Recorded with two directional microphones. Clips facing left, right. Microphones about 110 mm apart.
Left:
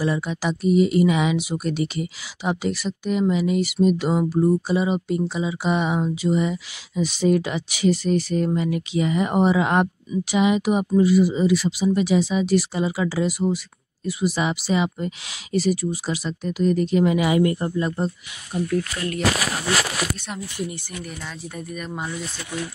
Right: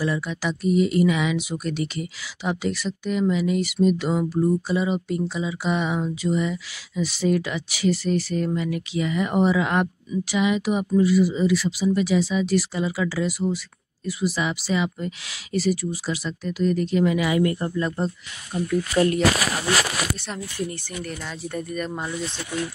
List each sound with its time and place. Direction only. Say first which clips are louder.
0.0 s speech: left 2 dB; 20° left (ahead or behind)
1.5 s speech: left 3 dB; 15° left (ahead or behind)
21.5 s speech: right 3 dB; 5° left (ahead or behind)